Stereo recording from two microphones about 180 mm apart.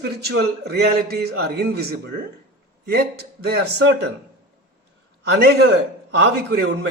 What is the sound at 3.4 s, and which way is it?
Speech, 65° right (ahead or behind).